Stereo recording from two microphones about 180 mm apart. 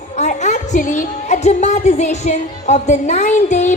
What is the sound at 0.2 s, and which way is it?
A woman's voice, 40° left (ahead or behind).